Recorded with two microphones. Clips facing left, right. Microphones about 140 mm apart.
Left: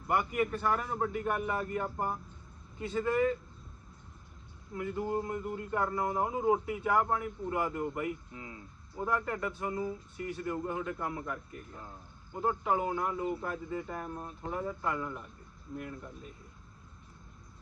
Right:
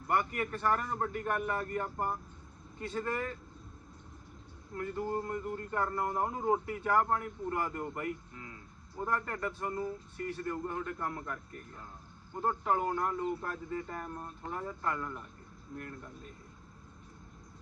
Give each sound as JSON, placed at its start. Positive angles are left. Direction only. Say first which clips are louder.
{"t": 0.1, "sound": "speech", "louder": "left 2 dB", "side_deg": 5}
{"t": 4.7, "sound": "speech", "louder": "left 2 dB", "side_deg": 5}
{"t": 8.3, "sound": "speech", "louder": "left 3 dB", "side_deg": 20}
{"t": 9.0, "sound": "speech", "louder": "left 2 dB", "side_deg": 10}